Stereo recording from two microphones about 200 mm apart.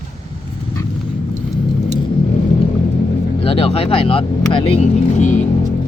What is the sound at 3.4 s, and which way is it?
Speech, 30° left (ahead or behind).